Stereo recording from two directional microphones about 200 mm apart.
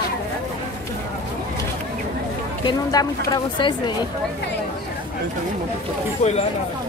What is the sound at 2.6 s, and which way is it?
A woman's voice, 20° left (ahead or behind).